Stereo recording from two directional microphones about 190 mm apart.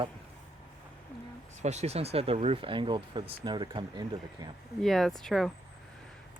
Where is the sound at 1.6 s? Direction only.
35° right (ahead or behind).